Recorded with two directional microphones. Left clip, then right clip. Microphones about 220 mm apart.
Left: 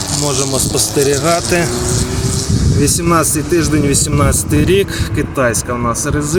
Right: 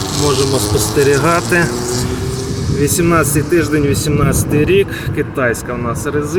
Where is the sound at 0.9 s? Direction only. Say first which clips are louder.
Right 1 dB; 20° left (ahead or behind).